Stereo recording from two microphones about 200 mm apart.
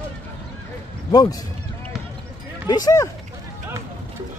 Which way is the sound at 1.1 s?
20° left (ahead or behind).